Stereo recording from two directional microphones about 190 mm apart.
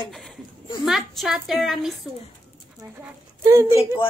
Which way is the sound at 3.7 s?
30° left (ahead or behind).